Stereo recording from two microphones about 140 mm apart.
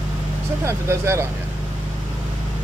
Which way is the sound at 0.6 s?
20° right (ahead or behind).